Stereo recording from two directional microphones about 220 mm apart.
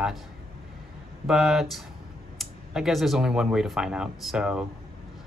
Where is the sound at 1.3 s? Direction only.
Centre (ahead or behind).